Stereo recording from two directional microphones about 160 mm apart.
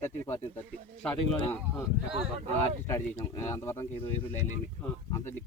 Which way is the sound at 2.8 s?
15° left (ahead or behind).